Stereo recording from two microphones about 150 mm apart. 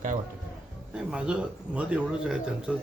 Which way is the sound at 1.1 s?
5° right (ahead or behind).